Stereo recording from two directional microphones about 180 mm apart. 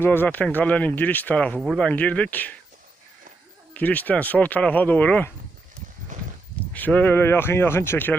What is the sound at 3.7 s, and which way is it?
Speech, 10° left (ahead or behind).